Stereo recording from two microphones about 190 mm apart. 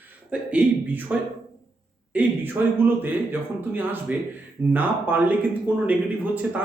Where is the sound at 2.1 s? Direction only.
10° right (ahead or behind).